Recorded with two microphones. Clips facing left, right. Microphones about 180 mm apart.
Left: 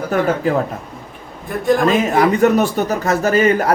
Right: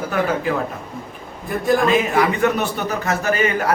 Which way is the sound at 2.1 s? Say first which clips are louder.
Left 5 dB; 40° left (ahead or behind).